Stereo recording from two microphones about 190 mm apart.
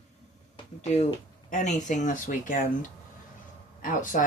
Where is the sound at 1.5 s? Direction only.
40° left (ahead or behind).